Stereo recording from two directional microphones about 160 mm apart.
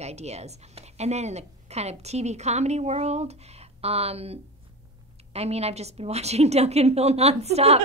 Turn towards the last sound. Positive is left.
turn(degrees=-40)  # may be behind; listen again after turning